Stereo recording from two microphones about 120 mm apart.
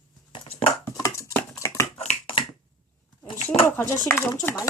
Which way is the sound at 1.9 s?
50° left (ahead or behind).